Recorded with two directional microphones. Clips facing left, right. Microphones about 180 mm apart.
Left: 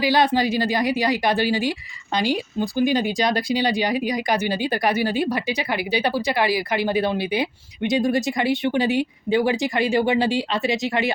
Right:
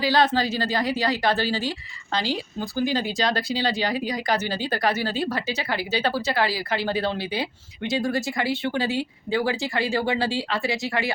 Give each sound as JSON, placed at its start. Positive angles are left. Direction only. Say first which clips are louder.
{"t": 0.0, "sound": "speech", "louder": "left 2 dB", "side_deg": 15}